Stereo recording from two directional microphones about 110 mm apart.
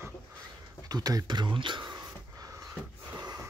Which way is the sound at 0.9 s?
35° right (ahead or behind).